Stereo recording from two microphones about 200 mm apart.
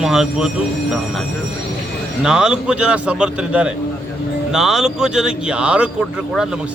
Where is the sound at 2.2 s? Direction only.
5° right (ahead or behind).